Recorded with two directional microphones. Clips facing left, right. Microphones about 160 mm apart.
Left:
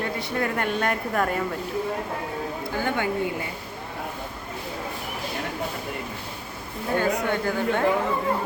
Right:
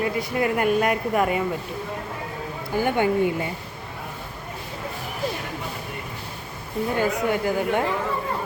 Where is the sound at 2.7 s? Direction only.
15° right (ahead or behind).